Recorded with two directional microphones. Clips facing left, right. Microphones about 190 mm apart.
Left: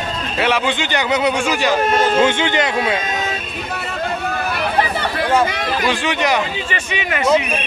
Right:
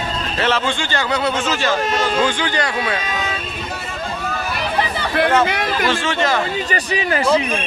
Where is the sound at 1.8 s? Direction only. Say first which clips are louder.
Left 4 dB; 50° left (ahead or behind).